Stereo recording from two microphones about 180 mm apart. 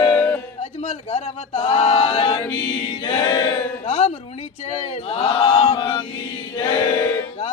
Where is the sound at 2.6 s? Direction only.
30° left (ahead or behind).